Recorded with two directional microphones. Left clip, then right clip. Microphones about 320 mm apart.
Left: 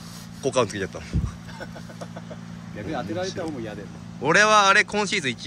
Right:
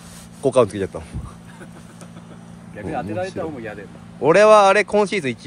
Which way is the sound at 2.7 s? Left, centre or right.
Right.